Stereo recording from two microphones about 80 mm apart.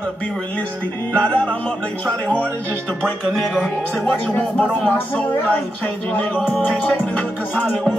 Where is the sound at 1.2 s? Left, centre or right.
Centre.